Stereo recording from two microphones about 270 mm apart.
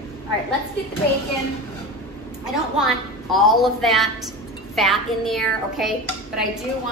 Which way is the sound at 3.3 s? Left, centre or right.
Centre.